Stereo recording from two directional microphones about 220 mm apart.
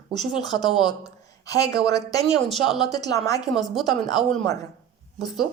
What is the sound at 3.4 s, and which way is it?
Speech, centre (ahead or behind).